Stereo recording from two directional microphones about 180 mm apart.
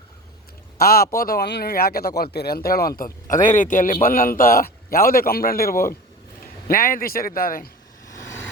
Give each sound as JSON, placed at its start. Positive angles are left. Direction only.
{"t": 0.8, "sound": "a man's voice", "side_deg": 55}
{"t": 8.0, "sound": "vehicle", "side_deg": 15}